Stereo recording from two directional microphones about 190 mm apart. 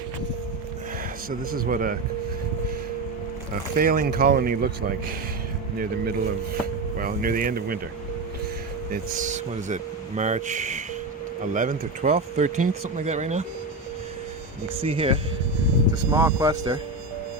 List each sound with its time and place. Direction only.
1.3 s speech: 50° right (ahead or behind)
3.5 s speech: 50° right (ahead or behind)
8.9 s speech: 40° right (ahead or behind)
14.8 s speech: 30° right (ahead or behind)
16.1 s speech: 15° right (ahead or behind)